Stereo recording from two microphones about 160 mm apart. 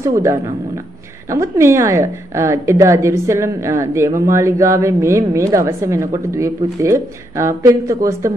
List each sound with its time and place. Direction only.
0.0 s a woman's voice: 20° right (ahead or behind)